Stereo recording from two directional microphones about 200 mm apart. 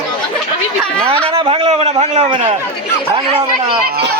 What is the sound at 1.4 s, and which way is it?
A man's voice, 25° right (ahead or behind).